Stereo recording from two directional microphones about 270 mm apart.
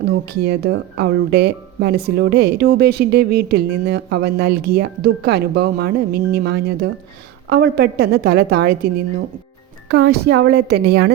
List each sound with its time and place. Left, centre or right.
0.3 s a woman's voice: right